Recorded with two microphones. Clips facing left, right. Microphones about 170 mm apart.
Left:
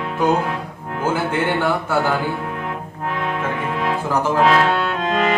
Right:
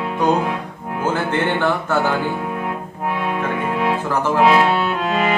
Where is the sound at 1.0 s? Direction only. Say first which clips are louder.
Even; 10° left (ahead or behind).